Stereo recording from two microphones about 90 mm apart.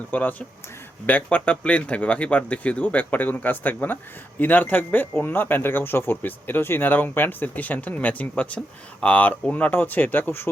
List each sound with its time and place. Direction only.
0.1 s speech: 20° left (ahead or behind)